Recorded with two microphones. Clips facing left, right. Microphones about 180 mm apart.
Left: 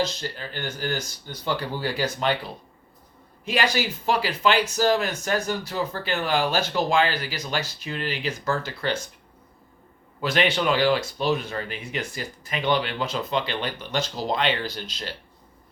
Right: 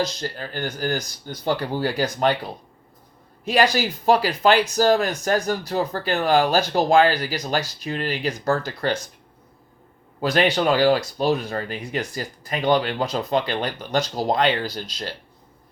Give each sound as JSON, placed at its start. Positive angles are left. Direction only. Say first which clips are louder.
{"t": 0.2, "sound": "speech", "louder": "right 4 dB", "side_deg": -45}
{"t": 3.4, "sound": "speech", "louder": "right 5 dB", "side_deg": -40}
{"t": 10.2, "sound": "speech", "louder": "right 3 dB", "side_deg": -40}